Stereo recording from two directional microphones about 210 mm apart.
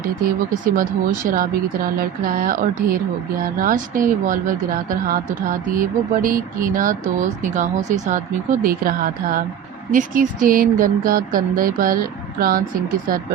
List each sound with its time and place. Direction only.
0.6 s speech: 40° right (ahead or behind)